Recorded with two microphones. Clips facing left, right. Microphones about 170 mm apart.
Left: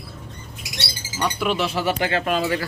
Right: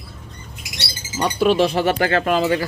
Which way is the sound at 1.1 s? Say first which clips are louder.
Right 6 dB; 35° right (ahead or behind).